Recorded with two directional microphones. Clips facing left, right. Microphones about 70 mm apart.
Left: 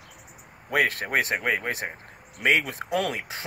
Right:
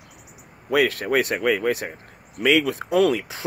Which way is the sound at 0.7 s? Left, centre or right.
Left.